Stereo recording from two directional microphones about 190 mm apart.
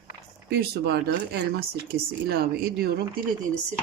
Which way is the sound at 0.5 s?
55° right (ahead or behind).